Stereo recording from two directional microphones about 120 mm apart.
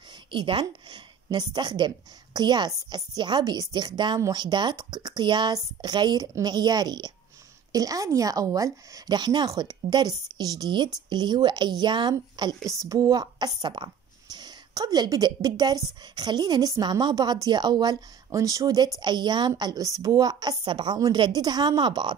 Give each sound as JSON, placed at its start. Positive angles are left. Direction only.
{"t": 0.1, "sound": "a woman's voice", "side_deg": -40}